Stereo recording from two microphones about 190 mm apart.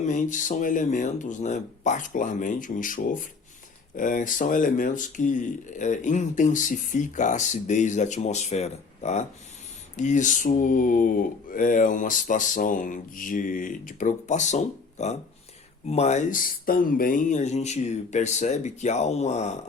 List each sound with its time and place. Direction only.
0.0 s speech: 40° left (ahead or behind)